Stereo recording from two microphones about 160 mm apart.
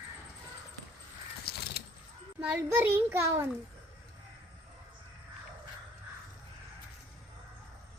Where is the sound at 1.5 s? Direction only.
80° left.